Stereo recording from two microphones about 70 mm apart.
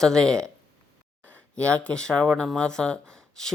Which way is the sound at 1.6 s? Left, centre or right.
Centre.